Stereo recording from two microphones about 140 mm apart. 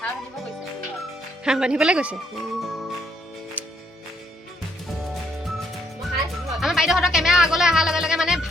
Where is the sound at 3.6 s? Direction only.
10° right (ahead or behind).